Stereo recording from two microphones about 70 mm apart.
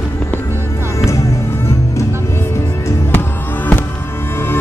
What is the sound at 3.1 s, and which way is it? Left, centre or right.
Music, left.